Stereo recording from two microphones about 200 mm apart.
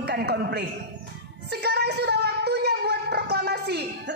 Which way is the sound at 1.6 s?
55° right (ahead or behind).